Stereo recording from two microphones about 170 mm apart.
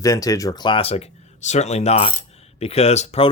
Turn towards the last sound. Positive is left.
turn(degrees=40)  # may be behind; listen again after turning